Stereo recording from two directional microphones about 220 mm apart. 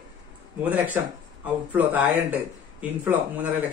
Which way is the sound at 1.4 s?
5° right (ahead or behind).